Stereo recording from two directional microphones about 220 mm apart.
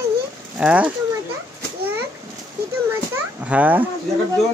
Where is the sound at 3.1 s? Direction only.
5° right (ahead or behind).